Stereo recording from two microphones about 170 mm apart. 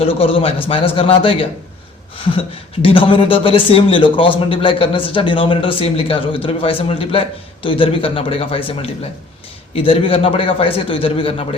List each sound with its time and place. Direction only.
0.0 s a man's voice: 35° left (ahead or behind)
2.8 s a man's voice: 30° left (ahead or behind)
9.7 s a man's voice: 30° left (ahead or behind)